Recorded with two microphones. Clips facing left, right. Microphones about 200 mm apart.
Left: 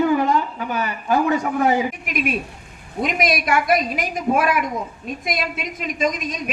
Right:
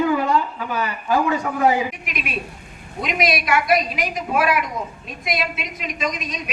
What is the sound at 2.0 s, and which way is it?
A woman's voice, 50° left (ahead or behind).